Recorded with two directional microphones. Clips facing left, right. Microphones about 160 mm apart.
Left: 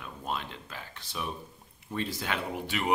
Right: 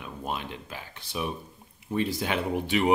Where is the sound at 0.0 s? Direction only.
15° right (ahead or behind).